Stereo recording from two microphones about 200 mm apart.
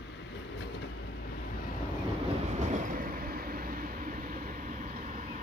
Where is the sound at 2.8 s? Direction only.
45° right (ahead or behind).